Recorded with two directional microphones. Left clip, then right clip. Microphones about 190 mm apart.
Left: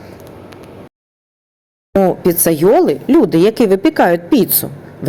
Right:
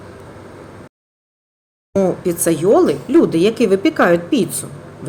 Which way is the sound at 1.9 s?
30° left (ahead or behind).